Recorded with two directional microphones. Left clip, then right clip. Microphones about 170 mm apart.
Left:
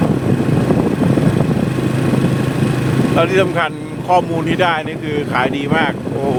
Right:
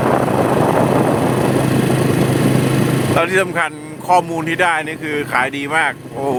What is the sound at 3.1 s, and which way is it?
Speech, 15° right (ahead or behind).